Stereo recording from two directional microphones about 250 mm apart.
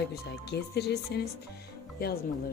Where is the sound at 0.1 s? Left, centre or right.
Left.